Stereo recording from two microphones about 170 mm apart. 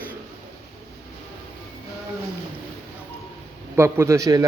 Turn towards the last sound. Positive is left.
turn(degrees=-20)  # may be behind; listen again after turning